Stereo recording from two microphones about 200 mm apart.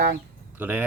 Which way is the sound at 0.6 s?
5° right (ahead or behind).